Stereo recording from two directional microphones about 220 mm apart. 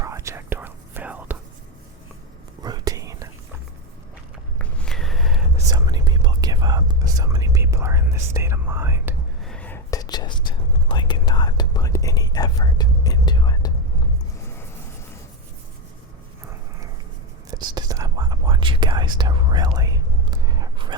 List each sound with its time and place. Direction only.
0.0 s whispering: 15° right (ahead or behind)
2.6 s whispering: 20° right (ahead or behind)
4.5 s a sound: 5° left (ahead or behind)
5.7 s whispering: 20° right (ahead or behind)
9.4 s whispering: 5° left (ahead or behind)
17.5 s whispering: 15° right (ahead or behind)